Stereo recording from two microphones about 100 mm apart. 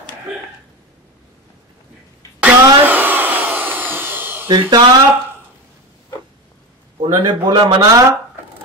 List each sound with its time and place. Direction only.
2.4 s a sound: 20° right (ahead or behind)
4.5 s speech: 45° right (ahead or behind)
7.0 s speech: 50° right (ahead or behind)